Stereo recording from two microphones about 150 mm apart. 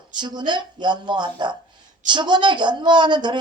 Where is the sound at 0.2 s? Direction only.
30° right (ahead or behind).